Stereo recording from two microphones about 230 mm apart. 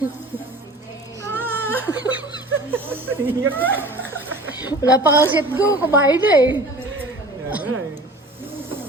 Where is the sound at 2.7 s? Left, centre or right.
Centre.